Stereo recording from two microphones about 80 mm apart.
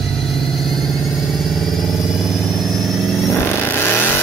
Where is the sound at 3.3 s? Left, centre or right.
Left.